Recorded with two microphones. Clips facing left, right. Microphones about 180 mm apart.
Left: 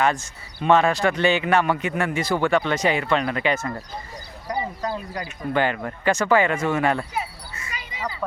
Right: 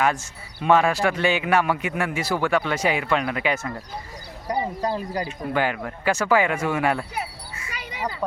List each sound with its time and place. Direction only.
0.0 s speech: 10° right (ahead or behind)
4.4 s speech: 30° right (ahead or behind)
5.5 s speech: 5° right (ahead or behind)
7.7 s quack: 65° right (ahead or behind)